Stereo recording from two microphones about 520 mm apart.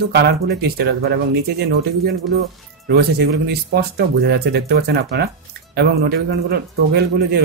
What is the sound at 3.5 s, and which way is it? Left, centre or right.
Speech, centre.